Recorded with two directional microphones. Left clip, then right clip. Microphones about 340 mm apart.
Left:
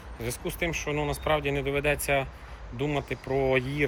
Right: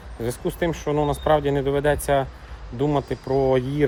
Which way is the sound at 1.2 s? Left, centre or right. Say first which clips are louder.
Right 6 dB; right.